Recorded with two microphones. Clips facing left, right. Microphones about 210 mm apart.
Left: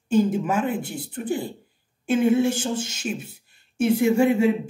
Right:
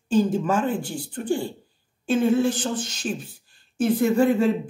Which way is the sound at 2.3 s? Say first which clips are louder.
Left 1 dB; 25° left (ahead or behind).